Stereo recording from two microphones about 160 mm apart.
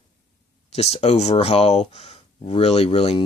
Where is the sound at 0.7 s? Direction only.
40° left (ahead or behind).